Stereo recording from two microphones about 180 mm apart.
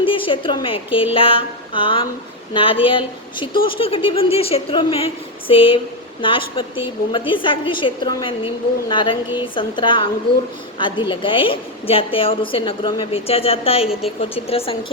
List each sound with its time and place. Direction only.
0.0 s a woman's voice: 30° left (ahead or behind)